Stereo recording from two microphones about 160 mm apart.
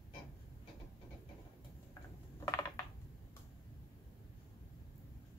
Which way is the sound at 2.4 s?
20° left (ahead or behind).